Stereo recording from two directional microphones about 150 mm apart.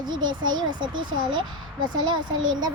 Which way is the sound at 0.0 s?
30° right (ahead or behind).